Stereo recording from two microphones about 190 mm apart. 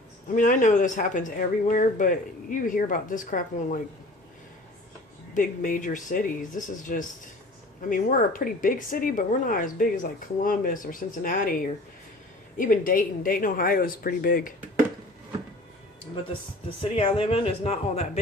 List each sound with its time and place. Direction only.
0.3 s speech: 40° left (ahead or behind)
5.3 s speech: 45° left (ahead or behind)
16.9 s speech: 30° left (ahead or behind)